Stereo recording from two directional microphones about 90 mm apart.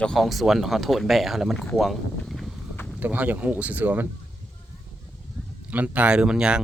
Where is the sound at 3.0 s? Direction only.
20° right (ahead or behind).